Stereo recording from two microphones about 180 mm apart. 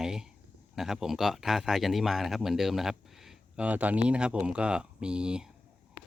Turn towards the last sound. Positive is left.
turn(degrees=-5)  # may be behind; listen again after turning